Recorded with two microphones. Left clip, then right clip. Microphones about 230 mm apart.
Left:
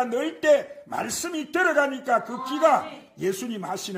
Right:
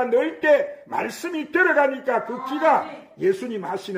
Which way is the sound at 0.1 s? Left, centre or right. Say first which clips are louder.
Right 4 dB; left.